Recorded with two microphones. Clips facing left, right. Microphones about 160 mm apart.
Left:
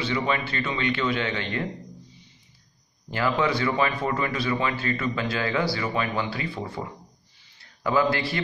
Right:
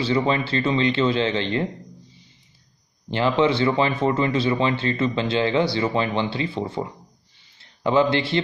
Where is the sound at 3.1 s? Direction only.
25° right (ahead or behind).